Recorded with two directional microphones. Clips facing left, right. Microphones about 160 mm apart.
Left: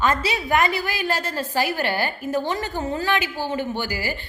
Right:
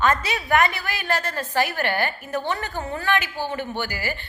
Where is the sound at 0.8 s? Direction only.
10° left (ahead or behind).